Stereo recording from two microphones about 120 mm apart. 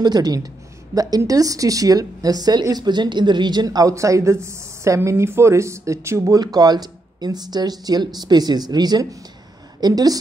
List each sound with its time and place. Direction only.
0.0 s a woman's voice: 35° right (ahead or behind)